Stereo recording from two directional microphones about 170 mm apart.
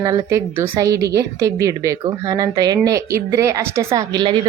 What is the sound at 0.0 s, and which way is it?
A woman's voice, 20° right (ahead or behind).